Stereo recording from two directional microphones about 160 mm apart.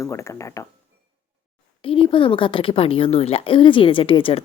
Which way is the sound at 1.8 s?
35° left (ahead or behind).